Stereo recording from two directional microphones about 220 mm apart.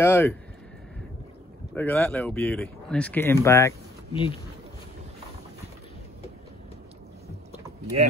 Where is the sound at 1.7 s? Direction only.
10° left (ahead or behind).